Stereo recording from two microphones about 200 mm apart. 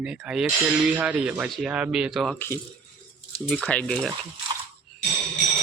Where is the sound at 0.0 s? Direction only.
5° right (ahead or behind).